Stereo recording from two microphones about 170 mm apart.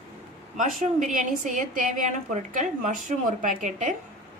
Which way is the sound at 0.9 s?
50° right (ahead or behind).